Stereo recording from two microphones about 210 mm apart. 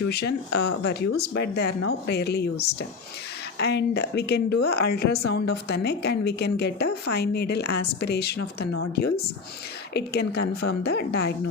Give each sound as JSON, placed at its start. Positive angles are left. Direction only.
{"t": 0.1, "sound": "speech", "side_deg": 50}
{"t": 9.9, "sound": "speech", "side_deg": 50}